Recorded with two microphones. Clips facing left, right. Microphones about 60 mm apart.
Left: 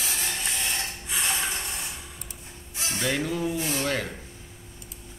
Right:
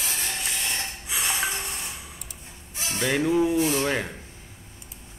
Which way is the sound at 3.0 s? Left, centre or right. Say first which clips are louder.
Right 6 dB; centre.